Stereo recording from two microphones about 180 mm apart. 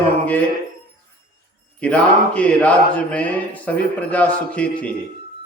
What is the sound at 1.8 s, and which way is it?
Speech, 5° left (ahead or behind).